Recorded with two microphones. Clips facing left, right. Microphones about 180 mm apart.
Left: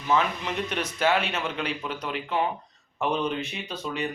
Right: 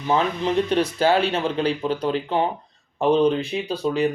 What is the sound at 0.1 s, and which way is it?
Speech, 30° right (ahead or behind).